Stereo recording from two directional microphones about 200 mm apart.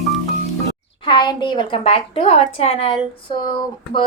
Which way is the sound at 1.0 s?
25° left (ahead or behind).